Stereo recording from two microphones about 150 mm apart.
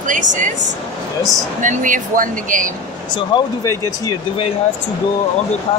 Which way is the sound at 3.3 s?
20° left (ahead or behind).